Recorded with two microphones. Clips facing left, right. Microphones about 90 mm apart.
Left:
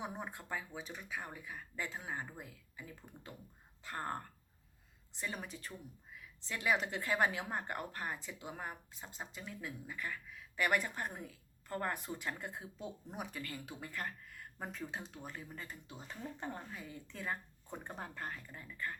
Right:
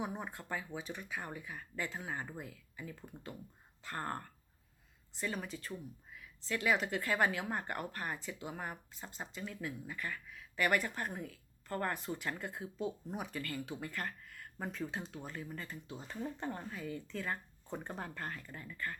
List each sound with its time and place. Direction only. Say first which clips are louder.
0.2 s speech: right 1 dB; 5° left (ahead or behind)